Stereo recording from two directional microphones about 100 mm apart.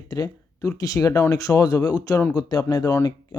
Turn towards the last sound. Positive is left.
turn(degrees=40)  # may be behind; listen again after turning